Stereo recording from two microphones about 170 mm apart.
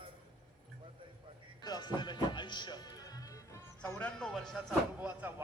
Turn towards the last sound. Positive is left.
turn(degrees=-10)  # may be behind; listen again after turning